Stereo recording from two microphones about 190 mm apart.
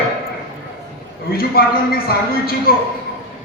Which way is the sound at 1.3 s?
55° left (ahead or behind).